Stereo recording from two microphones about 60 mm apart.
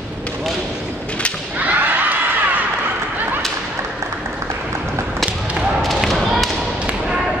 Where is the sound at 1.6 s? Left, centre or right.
Right.